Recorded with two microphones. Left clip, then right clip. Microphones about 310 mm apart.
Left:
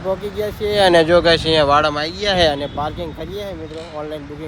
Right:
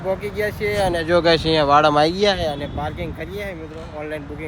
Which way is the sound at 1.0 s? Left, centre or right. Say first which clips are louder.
Left 3 dB; centre.